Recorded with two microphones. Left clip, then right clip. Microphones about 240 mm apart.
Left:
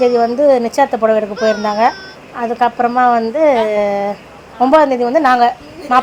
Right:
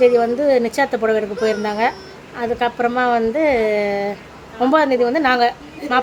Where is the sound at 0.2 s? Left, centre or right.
Centre.